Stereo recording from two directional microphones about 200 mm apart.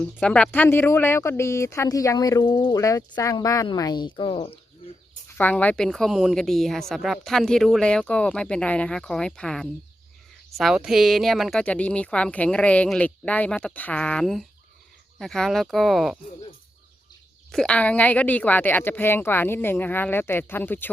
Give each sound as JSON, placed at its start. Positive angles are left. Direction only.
{"t": 0.0, "sound": "speech", "side_deg": 5}
{"t": 5.4, "sound": "a woman's voice", "side_deg": 10}
{"t": 17.5, "sound": "speech", "side_deg": 5}